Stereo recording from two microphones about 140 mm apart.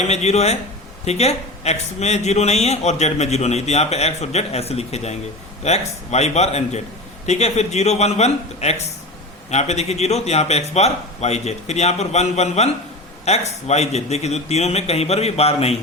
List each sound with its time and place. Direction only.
0.1 s speech: 50° left (ahead or behind)